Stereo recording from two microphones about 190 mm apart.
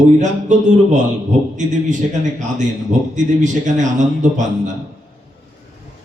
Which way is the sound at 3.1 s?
40° right (ahead or behind).